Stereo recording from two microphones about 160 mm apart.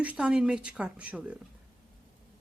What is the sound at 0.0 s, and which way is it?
Speech, 5° right (ahead or behind).